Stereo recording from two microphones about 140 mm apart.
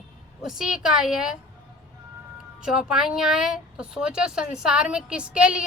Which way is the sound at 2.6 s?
5° right (ahead or behind).